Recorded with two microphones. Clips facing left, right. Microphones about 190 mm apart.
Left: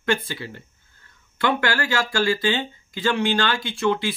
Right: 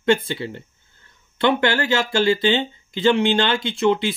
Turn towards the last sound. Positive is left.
turn(degrees=-20)  # may be behind; listen again after turning